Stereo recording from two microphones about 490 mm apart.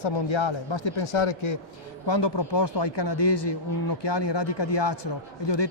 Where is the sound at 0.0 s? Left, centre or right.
Left.